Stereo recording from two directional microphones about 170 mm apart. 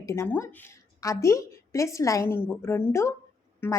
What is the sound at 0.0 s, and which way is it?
A woman's voice, 15° left (ahead or behind).